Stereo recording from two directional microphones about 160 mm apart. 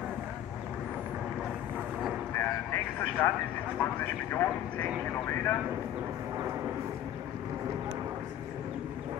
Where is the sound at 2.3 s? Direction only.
15° left (ahead or behind).